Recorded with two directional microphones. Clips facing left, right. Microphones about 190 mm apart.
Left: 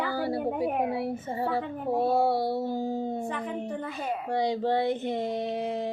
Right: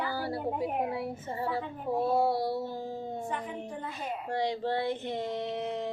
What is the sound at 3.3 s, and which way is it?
Speech, 75° left (ahead or behind).